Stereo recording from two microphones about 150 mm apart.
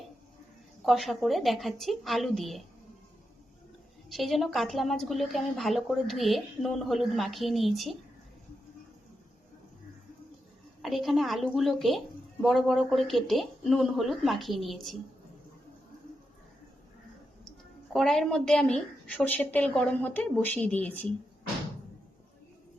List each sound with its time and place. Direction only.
0.9 s a woman's voice: centre (ahead or behind)
4.1 s a woman's voice: centre (ahead or behind)
10.8 s a woman's voice: centre (ahead or behind)
17.9 s a woman's voice: centre (ahead or behind)